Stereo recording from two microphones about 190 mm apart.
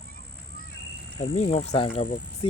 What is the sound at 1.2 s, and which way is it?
Speech, 30° left (ahead or behind).